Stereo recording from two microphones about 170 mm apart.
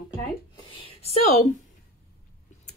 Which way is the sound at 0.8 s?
35° left (ahead or behind).